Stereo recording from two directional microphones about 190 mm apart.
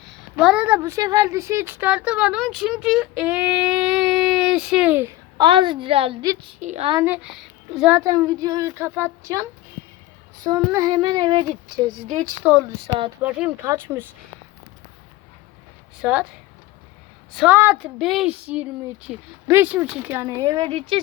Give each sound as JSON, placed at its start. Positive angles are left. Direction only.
{"t": 0.0, "sound": "a woman's voice", "side_deg": 0}
{"t": 5.4, "sound": "child singing", "side_deg": -25}
{"t": 6.6, "sound": "speech", "side_deg": -35}
{"t": 7.0, "sound": "speech", "side_deg": -5}
{"t": 7.9, "sound": "child singing", "side_deg": -20}
{"t": 9.2, "sound": "speech", "side_deg": -15}
{"t": 10.7, "sound": "child singing", "side_deg": -20}
{"t": 12.4, "sound": "speech", "side_deg": -5}
{"t": 16.0, "sound": "a woman's voice", "side_deg": -5}
{"t": 17.3, "sound": "speech", "side_deg": -5}